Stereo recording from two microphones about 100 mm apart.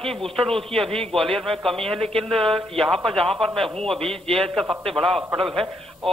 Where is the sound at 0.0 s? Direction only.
5° left (ahead or behind).